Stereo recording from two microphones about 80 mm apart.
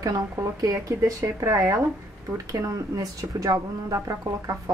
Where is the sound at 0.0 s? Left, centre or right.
Right.